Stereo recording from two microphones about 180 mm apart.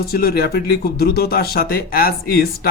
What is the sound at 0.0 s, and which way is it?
Speech, 60° left (ahead or behind).